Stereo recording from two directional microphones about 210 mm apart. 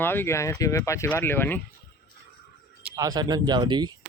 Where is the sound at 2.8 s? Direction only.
5° right (ahead or behind).